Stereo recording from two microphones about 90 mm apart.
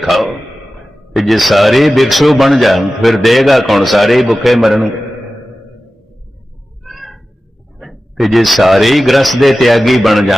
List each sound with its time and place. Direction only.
0.0 s a man's voice: centre (ahead or behind)
6.8 s a sound: centre (ahead or behind)
7.8 s a man's voice: centre (ahead or behind)